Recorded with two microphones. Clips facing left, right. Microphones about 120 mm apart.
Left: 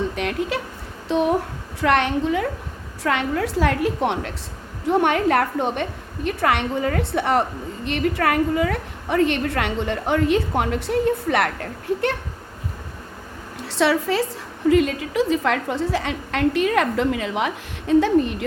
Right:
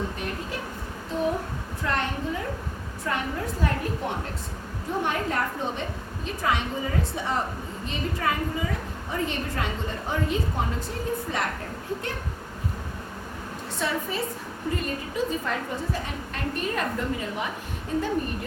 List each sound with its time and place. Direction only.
0.2 s a woman's voice: 90° left
4.9 s a woman's voice: 75° left (ahead or behind)
13.6 s a woman's voice: 85° left